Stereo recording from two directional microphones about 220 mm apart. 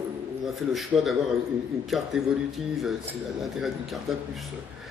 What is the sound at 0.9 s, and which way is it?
Speech, 25° right (ahead or behind).